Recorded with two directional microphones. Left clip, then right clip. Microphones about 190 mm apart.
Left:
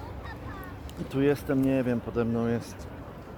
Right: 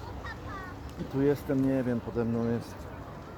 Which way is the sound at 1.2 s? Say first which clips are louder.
Left 2 dB; 5° left (ahead or behind).